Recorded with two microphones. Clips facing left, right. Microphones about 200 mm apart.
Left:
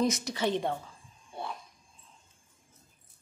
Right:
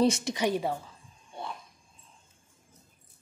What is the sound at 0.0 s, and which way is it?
Speech, 30° right (ahead or behind).